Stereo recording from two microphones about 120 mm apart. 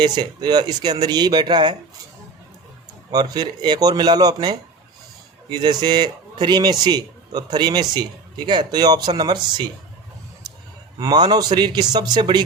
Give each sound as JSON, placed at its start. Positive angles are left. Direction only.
{"t": 0.0, "sound": "a man's voice", "side_deg": -35}
{"t": 3.1, "sound": "a man's voice", "side_deg": -35}
{"t": 10.4, "sound": "a sound", "side_deg": -35}
{"t": 10.9, "sound": "a man's voice", "side_deg": -35}